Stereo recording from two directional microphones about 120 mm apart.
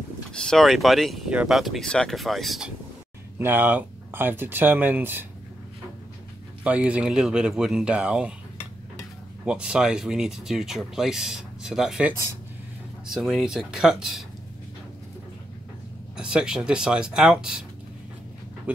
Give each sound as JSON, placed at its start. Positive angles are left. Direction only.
{"t": 0.3, "sound": "speech", "side_deg": 5}
{"t": 3.3, "sound": "speech", "side_deg": -15}
{"t": 6.6, "sound": "speech", "side_deg": -10}
{"t": 9.4, "sound": "speech", "side_deg": -5}
{"t": 16.2, "sound": "speech", "side_deg": -5}